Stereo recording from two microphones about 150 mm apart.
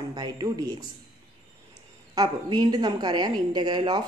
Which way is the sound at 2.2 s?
30° right (ahead or behind).